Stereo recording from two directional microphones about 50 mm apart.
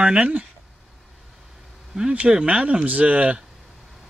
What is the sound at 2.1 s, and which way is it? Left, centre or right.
Speech, right.